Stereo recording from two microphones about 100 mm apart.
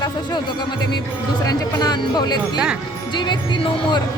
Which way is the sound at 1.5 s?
45° left (ahead or behind).